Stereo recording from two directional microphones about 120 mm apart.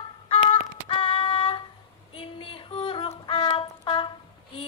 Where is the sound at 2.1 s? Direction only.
45° left (ahead or behind).